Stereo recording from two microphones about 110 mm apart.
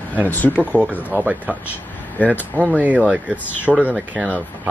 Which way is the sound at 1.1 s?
15° right (ahead or behind).